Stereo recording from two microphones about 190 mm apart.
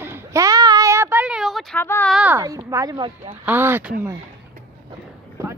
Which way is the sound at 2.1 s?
10° right (ahead or behind).